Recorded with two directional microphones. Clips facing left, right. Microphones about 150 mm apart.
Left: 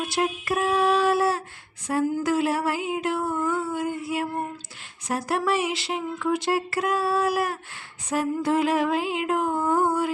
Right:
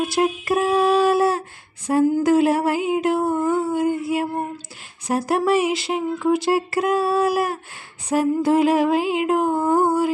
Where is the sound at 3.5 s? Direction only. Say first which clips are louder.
Right 6 dB; 40° right (ahead or behind).